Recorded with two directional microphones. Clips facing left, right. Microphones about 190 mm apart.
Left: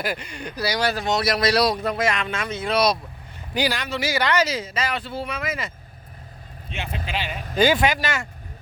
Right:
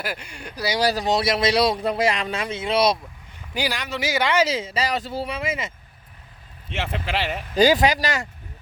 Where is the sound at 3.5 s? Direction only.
10° right (ahead or behind).